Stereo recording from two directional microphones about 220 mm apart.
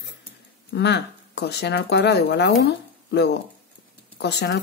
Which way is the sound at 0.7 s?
50° left (ahead or behind).